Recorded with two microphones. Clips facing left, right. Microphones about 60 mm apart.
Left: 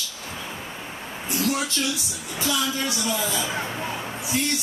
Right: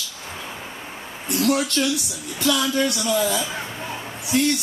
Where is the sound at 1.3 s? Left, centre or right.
Right.